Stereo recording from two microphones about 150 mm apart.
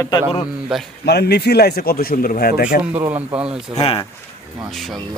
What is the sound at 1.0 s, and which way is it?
Speech, 90° left.